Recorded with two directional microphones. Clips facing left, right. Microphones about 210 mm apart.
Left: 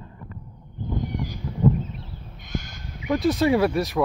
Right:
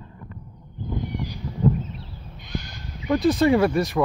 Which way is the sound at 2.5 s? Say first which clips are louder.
Left 1 dB; 45° left (ahead or behind).